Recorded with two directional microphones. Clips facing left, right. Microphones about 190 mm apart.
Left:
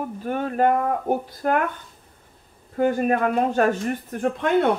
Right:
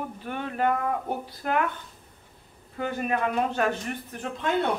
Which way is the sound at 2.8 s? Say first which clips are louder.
Left 7 dB; 45° left (ahead or behind).